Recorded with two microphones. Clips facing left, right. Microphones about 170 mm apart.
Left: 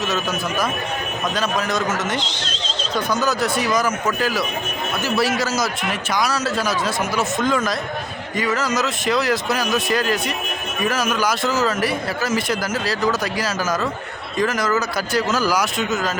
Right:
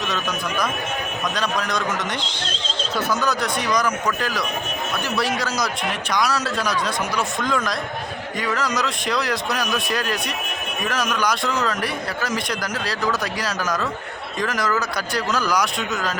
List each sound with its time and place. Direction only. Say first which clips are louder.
0.1 s a man's voice: left 3 dB; 5° left (ahead or behind)
2.3 s neigh: left 1 dB; 55° right (ahead or behind)
2.9 s a man's voice: left 2 dB; centre (ahead or behind)